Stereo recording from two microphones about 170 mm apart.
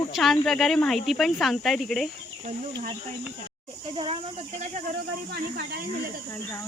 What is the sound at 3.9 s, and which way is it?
Speech, 30° right (ahead or behind).